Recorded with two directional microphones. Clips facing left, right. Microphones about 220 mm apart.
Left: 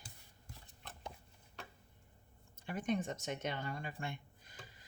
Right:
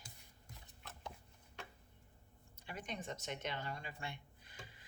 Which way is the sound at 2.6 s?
50° left (ahead or behind).